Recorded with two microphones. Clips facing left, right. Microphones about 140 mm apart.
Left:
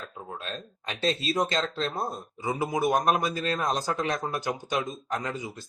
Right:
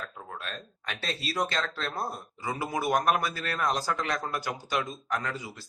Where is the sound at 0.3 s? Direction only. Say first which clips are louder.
Left 2 dB; 20° left (ahead or behind).